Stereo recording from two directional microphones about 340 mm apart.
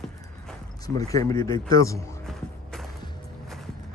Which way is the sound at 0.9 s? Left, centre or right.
Centre.